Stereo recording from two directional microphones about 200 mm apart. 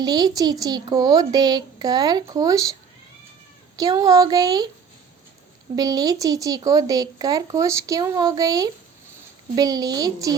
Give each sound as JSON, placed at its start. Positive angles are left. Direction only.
{"t": 0.0, "sound": "a woman's voice", "side_deg": -20}
{"t": 3.8, "sound": "a woman's voice", "side_deg": -20}
{"t": 5.7, "sound": "a woman's voice", "side_deg": -20}